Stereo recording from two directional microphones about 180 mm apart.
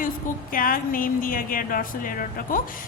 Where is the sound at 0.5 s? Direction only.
50° left (ahead or behind).